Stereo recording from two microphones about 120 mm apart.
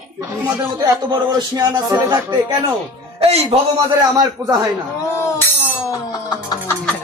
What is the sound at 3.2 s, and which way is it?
Speech, 55° right (ahead or behind).